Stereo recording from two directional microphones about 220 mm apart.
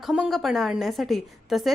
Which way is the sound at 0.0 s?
Centre (ahead or behind).